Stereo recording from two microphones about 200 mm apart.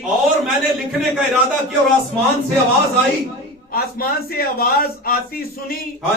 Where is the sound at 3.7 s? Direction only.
50° left (ahead or behind).